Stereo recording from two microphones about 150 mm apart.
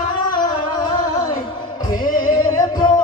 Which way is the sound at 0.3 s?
30° left (ahead or behind).